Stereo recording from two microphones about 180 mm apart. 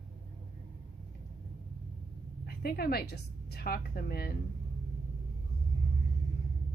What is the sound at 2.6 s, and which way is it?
A woman's voice, 55° left (ahead or behind).